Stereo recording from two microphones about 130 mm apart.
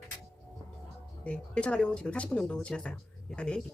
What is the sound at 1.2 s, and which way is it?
Speech, 10° left (ahead or behind).